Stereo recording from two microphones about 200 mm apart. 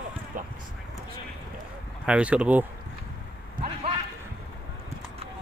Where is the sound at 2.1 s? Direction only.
5° right (ahead or behind).